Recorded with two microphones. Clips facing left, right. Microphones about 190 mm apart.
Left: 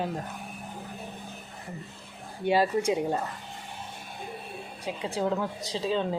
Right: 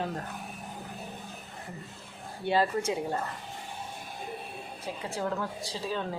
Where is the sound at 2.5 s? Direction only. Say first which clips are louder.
Left 3 dB; 15° left (ahead or behind).